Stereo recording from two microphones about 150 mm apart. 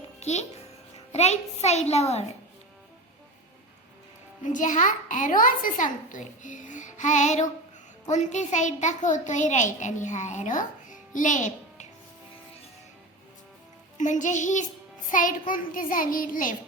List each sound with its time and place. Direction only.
0.2 s a child's voice: 50° left (ahead or behind)
4.4 s a child's voice: 55° left (ahead or behind)
11.1 s music: 60° left (ahead or behind)
14.0 s a child's voice: 55° left (ahead or behind)